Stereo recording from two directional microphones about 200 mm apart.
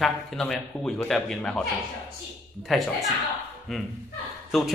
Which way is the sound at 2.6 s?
Centre (ahead or behind).